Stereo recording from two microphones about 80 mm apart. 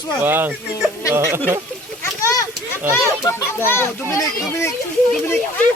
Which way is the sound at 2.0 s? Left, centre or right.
Left.